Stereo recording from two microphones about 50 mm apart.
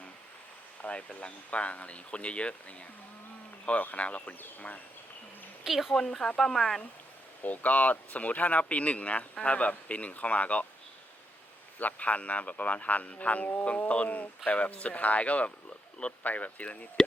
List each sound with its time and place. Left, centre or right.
0.8 s speech: left
3.7 s speech: left
5.6 s a woman's voice: centre
5.9 s speech: centre
7.4 s speech: left
11.8 s speech: left